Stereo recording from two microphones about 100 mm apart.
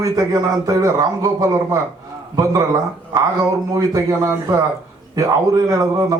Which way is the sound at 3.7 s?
35° right (ahead or behind).